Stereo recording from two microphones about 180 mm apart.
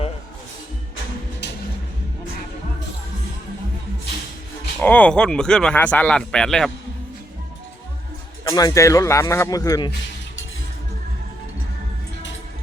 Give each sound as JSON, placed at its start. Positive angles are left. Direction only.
{"t": 4.8, "sound": "speech", "side_deg": 10}
{"t": 8.4, "sound": "a man's voice", "side_deg": 20}